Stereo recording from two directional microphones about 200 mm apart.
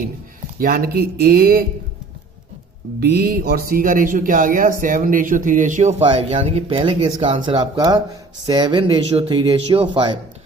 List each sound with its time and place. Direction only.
0.6 s speech: 50° right (ahead or behind)
3.0 s speech: 50° right (ahead or behind); by 10.2 s 25° right (ahead or behind)